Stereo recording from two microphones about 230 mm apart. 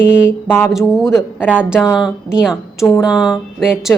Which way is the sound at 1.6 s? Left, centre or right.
Centre.